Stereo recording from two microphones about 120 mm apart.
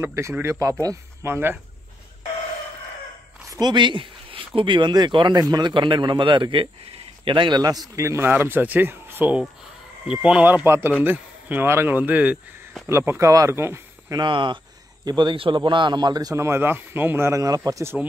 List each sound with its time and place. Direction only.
0.0 s speech: 20° right (ahead or behind)
3.4 s speech: 35° right (ahead or behind)
14.2 s speech: 40° right (ahead or behind)